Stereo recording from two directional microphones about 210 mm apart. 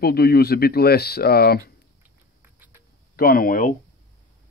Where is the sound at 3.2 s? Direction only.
45° left (ahead or behind).